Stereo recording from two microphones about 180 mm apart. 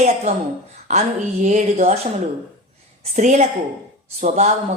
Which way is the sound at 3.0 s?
40° right (ahead or behind).